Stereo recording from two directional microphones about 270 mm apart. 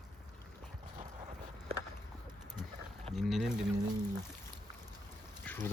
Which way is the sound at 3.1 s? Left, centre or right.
Centre.